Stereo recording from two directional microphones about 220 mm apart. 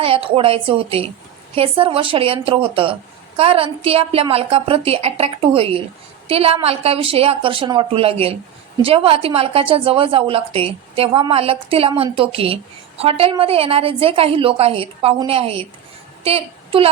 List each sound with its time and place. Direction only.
0.0 s a woman's voice: 25° right (ahead or behind)